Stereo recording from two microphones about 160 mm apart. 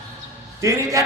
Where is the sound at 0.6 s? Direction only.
20° right (ahead or behind).